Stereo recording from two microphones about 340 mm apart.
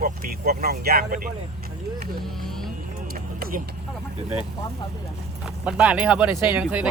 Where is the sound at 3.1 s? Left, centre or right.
Right.